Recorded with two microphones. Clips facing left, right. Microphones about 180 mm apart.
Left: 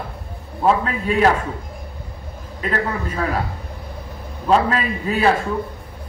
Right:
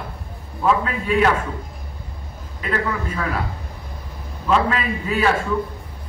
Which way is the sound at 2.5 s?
40° left (ahead or behind).